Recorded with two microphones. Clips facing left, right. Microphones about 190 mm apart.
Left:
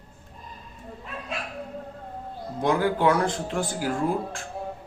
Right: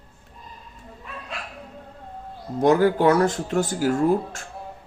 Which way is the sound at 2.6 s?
45° right (ahead or behind).